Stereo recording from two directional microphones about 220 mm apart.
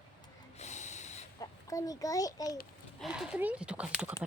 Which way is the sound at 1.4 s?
15° left (ahead or behind).